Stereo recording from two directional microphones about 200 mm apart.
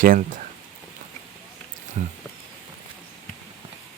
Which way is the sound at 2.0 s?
40° right (ahead or behind).